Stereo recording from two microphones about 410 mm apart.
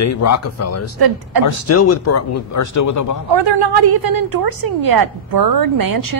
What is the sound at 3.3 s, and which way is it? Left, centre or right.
A woman's voice, right.